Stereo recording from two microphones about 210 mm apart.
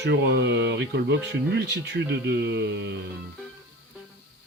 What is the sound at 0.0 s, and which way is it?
Speech, 55° right (ahead or behind).